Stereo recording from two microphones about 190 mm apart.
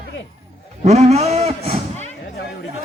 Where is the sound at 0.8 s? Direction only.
35° right (ahead or behind).